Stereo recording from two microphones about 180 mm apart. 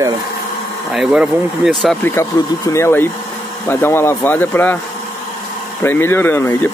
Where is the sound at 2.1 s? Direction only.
15° left (ahead or behind).